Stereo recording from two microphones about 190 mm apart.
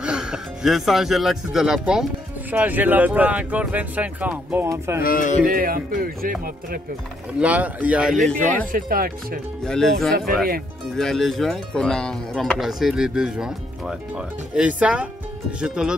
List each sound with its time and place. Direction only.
0.0 s speech: 5° right (ahead or behind)
5.0 s speech: 45° left (ahead or behind)
5.5 s speech: 50° right (ahead or behind)
7.3 s speech: 5° right (ahead or behind)
8.7 s speech: 50° right (ahead or behind)
9.7 s speech: 5° left (ahead or behind)
10.1 s speech: 50° right (ahead or behind)
11.0 s speech: centre (ahead or behind)